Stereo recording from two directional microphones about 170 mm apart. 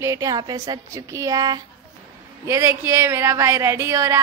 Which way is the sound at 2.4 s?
15° right (ahead or behind).